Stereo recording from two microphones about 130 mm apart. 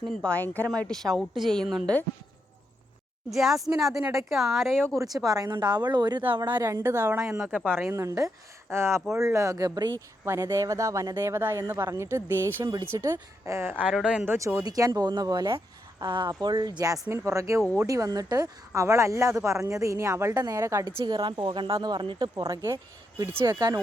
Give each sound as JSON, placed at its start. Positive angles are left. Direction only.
{"t": 0.0, "sound": "a woman's voice", "side_deg": 5}
{"t": 3.2, "sound": "a woman's voice", "side_deg": 0}
{"t": 5.1, "sound": "speech", "side_deg": -30}
{"t": 6.6, "sound": "speech", "side_deg": -25}
{"t": 13.8, "sound": "a woman's voice", "side_deg": -5}
{"t": 14.3, "sound": "speech", "side_deg": -25}
{"t": 23.4, "sound": "speech", "side_deg": -35}